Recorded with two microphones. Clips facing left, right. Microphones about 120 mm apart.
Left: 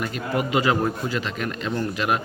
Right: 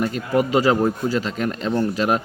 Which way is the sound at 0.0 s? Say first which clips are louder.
Right 5 dB; 40° right (ahead or behind).